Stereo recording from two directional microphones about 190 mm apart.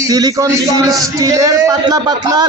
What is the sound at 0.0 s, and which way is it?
A man's voice, 20° right (ahead or behind).